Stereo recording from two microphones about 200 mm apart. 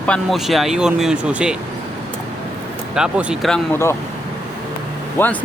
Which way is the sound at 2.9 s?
5° right (ahead or behind).